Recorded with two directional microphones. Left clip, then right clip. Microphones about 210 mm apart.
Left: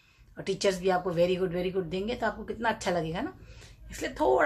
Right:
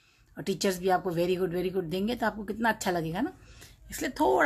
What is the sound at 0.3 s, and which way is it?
A woman's voice, 40° right (ahead or behind).